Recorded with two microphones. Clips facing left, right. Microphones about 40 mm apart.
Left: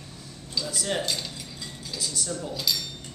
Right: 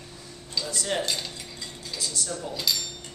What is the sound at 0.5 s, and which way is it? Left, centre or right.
A man's voice, centre.